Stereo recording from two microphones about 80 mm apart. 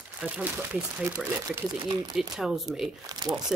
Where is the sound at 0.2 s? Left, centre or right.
Centre.